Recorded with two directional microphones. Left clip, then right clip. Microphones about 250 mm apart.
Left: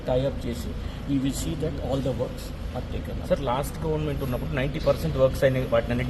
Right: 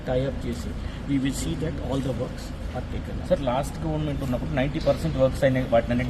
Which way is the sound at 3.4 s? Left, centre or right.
Left.